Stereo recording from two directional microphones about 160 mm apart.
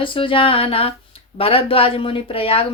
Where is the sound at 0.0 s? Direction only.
35° left (ahead or behind).